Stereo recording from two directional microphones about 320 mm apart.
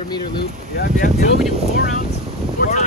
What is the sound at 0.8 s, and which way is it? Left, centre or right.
Speech, left.